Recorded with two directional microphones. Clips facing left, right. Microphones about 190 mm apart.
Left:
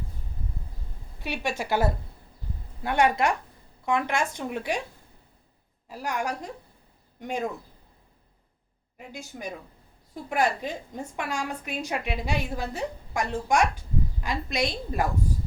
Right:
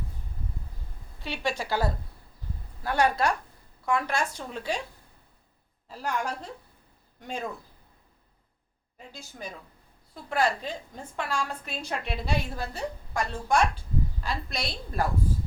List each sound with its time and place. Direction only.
1.2 s a woman's voice: 15° left (ahead or behind)
5.9 s a woman's voice: 15° left (ahead or behind)
9.3 s a woman's voice: 15° left (ahead or behind)